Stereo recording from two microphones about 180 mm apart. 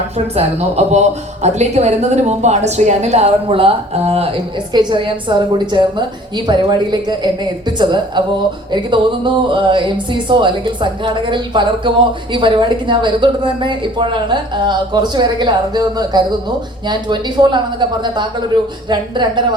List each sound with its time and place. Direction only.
0.3 s speech: 35° right (ahead or behind)
8.7 s a woman's voice: 25° right (ahead or behind)